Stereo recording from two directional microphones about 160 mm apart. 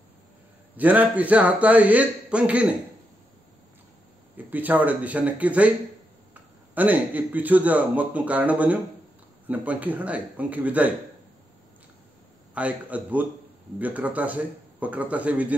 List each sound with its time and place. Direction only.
0.7 s a man's voice: 10° right (ahead or behind)
4.5 s a man's voice: 10° right (ahead or behind)
6.7 s a man's voice: 10° right (ahead or behind)
12.5 s a man's voice: 10° right (ahead or behind)